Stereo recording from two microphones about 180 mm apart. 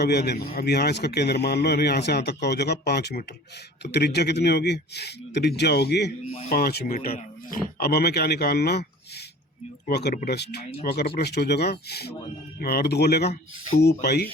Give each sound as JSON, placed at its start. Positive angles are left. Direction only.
{"t": 0.0, "sound": "a man's voice", "side_deg": 65}